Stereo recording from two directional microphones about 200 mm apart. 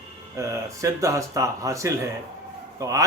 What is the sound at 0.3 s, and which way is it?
A man's voice, 15° right (ahead or behind).